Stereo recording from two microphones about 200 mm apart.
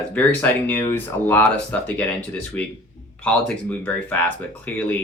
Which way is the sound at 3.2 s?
5° left (ahead or behind).